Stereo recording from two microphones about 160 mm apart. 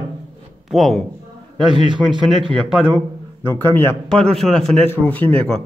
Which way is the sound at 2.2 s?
Centre (ahead or behind).